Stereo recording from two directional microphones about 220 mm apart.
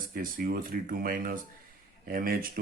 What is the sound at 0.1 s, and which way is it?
Speech, 40° right (ahead or behind).